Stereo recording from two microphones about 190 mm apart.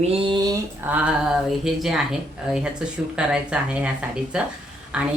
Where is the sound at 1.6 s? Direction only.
Centre (ahead or behind).